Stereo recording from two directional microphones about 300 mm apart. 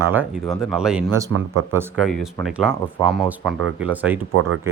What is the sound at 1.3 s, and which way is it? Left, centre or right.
Speech, right.